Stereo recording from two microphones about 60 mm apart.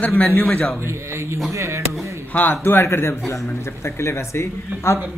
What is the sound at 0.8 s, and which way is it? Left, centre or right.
Speech, right.